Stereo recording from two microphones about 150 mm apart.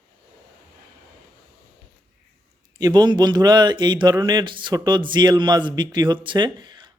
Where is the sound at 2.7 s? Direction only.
25° right (ahead or behind).